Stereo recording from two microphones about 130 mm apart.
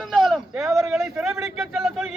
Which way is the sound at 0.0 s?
Centre (ahead or behind).